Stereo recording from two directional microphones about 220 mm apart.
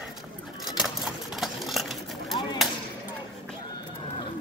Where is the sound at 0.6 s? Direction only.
Centre (ahead or behind).